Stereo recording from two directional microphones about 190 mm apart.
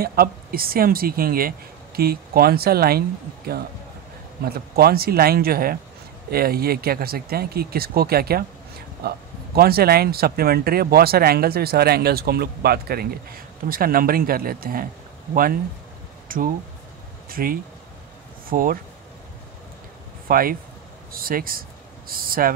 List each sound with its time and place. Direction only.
0.0 s speech: 50° right (ahead or behind)
4.5 s speech: 55° right (ahead or behind)
16.3 s a sound: 45° right (ahead or behind)
17.3 s speech: 50° right (ahead or behind)
20.2 s speech: 50° right (ahead or behind)